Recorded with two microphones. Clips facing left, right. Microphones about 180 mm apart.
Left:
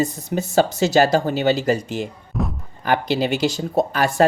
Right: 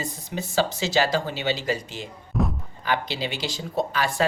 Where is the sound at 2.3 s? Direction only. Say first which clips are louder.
Even; centre (ahead or behind).